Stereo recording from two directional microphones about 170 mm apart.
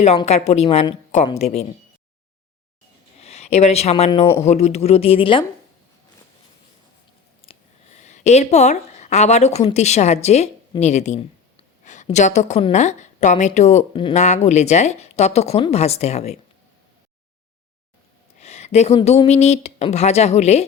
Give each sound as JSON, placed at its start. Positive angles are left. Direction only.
{"t": 0.3, "sound": "speech", "side_deg": 40}
{"t": 3.2, "sound": "speech", "side_deg": 40}
{"t": 7.4, "sound": "speech", "side_deg": 45}
{"t": 18.3, "sound": "a sound", "side_deg": 40}
{"t": 19.0, "sound": "speech", "side_deg": 40}